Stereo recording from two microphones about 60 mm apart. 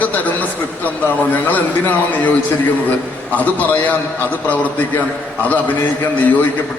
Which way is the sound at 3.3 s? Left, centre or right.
Left.